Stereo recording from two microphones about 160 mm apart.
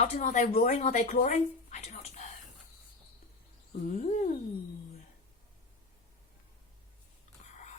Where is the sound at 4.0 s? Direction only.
50° left (ahead or behind).